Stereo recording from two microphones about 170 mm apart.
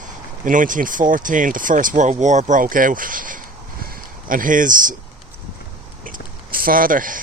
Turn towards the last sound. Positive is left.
turn(degrees=-50)  # may be behind; listen again after turning